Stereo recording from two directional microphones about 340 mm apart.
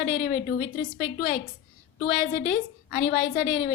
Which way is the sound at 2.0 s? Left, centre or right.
Left.